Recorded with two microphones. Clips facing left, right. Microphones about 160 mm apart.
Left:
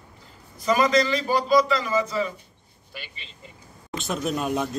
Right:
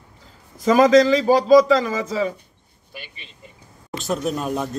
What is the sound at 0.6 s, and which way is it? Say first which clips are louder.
Speech: right 7 dB; 90° right.